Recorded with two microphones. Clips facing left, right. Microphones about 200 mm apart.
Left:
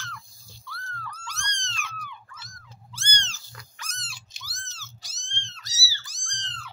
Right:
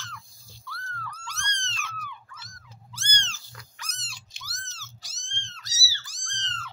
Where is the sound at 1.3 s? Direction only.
15° left (ahead or behind).